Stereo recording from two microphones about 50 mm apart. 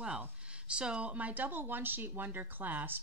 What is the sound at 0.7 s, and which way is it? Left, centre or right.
Speech, centre.